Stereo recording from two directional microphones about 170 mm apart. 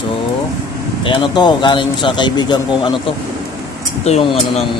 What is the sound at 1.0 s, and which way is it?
Speech, 30° left (ahead or behind).